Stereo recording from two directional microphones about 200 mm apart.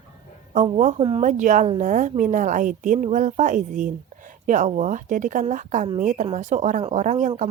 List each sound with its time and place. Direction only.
0.5 s a woman's voice: 40° right (ahead or behind)
0.9 s speech: 25° right (ahead or behind)
1.2 s a woman's voice: 40° right (ahead or behind)